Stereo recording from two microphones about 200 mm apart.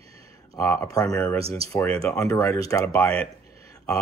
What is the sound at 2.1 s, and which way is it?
Speech, 15° left (ahead or behind).